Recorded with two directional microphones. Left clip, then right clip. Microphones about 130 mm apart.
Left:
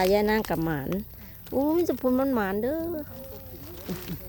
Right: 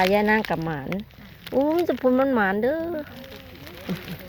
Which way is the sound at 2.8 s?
10° right (ahead or behind).